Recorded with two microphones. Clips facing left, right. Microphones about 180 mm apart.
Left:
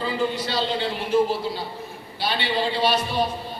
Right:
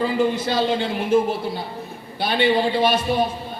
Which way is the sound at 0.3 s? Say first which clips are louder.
Right 4 dB; 50° right (ahead or behind).